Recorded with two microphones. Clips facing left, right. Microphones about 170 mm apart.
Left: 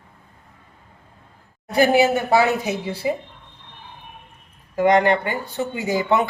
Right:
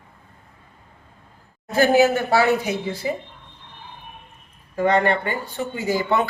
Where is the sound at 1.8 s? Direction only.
15° left (ahead or behind).